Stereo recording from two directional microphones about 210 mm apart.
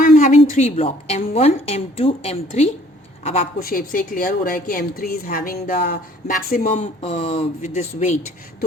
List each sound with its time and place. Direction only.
0.0 s a woman's voice: 40° left (ahead or behind)
3.6 s a woman's voice: 40° left (ahead or behind)